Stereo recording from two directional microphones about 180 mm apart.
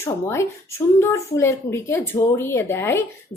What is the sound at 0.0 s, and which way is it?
Speech, 15° left (ahead or behind).